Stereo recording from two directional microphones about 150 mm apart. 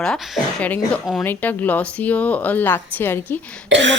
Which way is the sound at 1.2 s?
10° left (ahead or behind).